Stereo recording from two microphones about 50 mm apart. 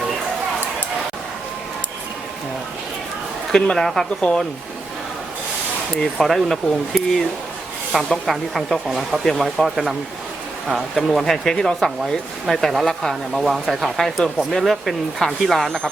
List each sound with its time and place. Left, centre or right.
3.8 s speech: centre
4.2 s speech: centre
6.2 s speech: centre